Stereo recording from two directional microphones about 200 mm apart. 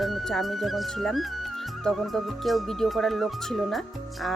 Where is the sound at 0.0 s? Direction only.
Centre (ahead or behind).